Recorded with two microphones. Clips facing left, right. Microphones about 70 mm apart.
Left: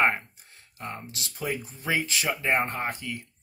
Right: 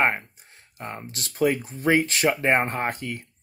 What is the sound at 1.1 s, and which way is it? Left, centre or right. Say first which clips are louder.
Speech: right 11 dB; right.